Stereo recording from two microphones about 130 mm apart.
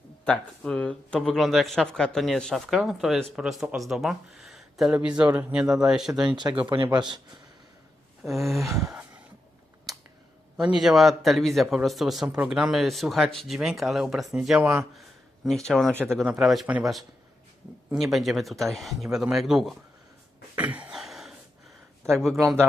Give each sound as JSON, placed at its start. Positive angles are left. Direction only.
{"t": 0.3, "sound": "speech", "side_deg": 10}
{"t": 6.3, "sound": "speech", "side_deg": -35}
{"t": 8.2, "sound": "speech", "side_deg": 0}
{"t": 8.9, "sound": "a sound", "side_deg": -10}
{"t": 10.6, "sound": "speech", "side_deg": -5}
{"t": 15.4, "sound": "speech", "side_deg": 5}
{"t": 20.6, "sound": "a sound", "side_deg": -10}